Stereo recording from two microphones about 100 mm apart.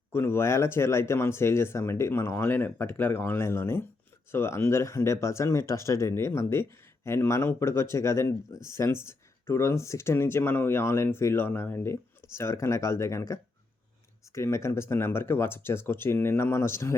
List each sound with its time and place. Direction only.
0.1 s speech: 25° left (ahead or behind)